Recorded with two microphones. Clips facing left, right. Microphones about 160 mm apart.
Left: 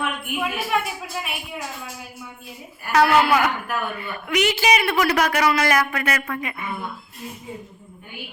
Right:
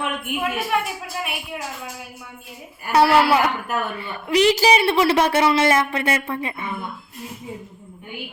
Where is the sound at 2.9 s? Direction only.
35° right (ahead or behind).